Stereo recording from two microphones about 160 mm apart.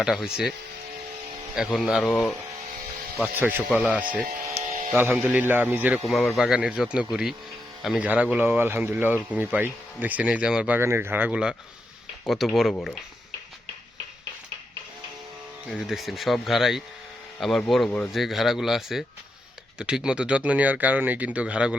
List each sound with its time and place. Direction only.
0.0 s speech: centre (ahead or behind)
1.5 s speech: centre (ahead or behind)
4.3 s a sound: 45° right (ahead or behind)
5.1 s speech: 10° right (ahead or behind)
15.7 s speech: centre (ahead or behind)
18.1 s speech: centre (ahead or behind)